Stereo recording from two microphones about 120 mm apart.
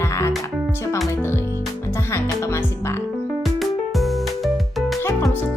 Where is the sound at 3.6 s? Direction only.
Centre (ahead or behind).